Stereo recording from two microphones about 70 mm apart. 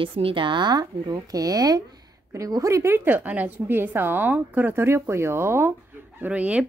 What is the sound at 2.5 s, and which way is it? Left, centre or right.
Speech, right.